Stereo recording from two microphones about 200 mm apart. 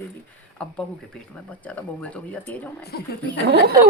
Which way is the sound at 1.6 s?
5° left (ahead or behind).